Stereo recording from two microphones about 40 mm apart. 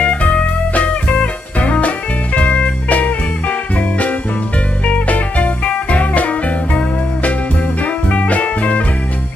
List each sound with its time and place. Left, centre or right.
0.0 s music: left
7.8 s music: left